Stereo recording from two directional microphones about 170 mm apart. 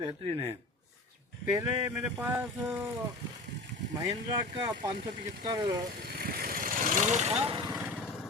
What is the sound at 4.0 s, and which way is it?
Speech, 20° right (ahead or behind).